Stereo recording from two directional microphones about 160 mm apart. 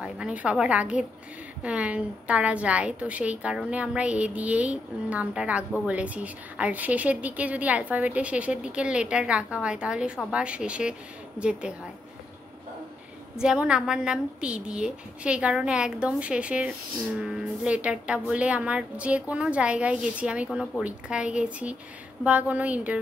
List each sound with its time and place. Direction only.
0.0 s a woman's voice: 5° right (ahead or behind)
13.4 s a woman's voice: 5° right (ahead or behind)